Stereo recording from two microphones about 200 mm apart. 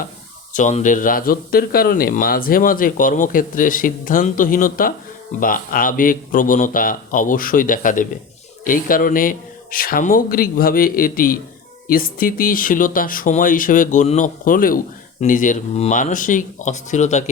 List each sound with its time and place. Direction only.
0.5 s speech: 40° left (ahead or behind)